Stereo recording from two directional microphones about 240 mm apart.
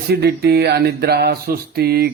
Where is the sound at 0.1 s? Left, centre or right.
Right.